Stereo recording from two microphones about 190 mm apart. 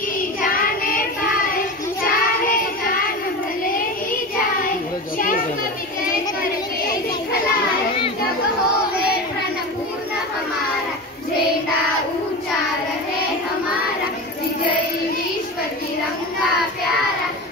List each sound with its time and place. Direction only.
0.4 s child singing: 50° left (ahead or behind)